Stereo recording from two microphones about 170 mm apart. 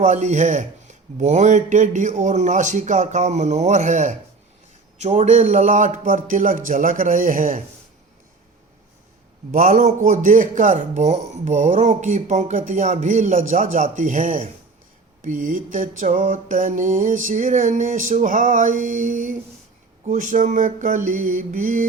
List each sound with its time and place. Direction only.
0.0 s speech: 45° right (ahead or behind)
9.5 s speech: 50° right (ahead or behind)